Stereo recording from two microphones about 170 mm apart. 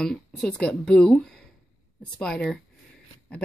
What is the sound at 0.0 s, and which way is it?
A woman's voice, 5° left (ahead or behind).